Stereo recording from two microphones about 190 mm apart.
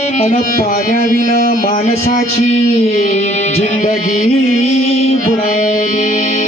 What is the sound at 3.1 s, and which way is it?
Music, 35° left (ahead or behind).